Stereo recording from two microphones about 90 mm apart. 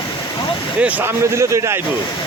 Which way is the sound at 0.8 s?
15° right (ahead or behind).